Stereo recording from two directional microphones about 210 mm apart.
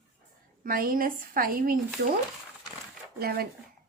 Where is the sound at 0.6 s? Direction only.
45° right (ahead or behind).